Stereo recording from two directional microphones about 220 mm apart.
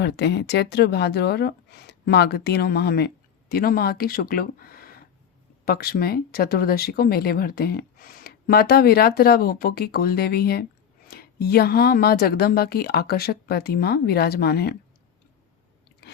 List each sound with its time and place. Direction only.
0.0 s speech: 50° left (ahead or behind)